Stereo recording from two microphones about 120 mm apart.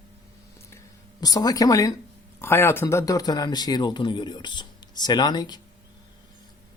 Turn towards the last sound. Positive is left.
turn(degrees=35)  # may be behind; listen again after turning